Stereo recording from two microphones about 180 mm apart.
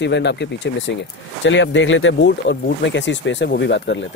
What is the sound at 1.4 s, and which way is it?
Speech, 90° left.